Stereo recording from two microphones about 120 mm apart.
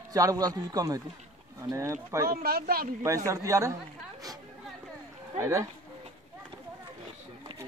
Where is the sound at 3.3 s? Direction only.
25° right (ahead or behind).